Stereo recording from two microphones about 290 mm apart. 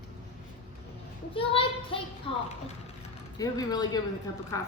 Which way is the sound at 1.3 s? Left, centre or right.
Centre.